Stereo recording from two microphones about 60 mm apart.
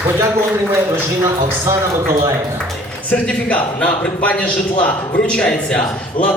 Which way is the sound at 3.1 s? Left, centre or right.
Left.